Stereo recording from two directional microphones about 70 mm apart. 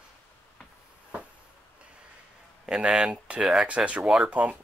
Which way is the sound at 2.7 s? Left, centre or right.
Centre.